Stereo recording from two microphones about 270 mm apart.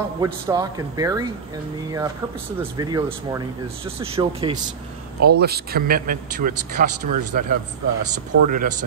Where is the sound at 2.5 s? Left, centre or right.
Centre.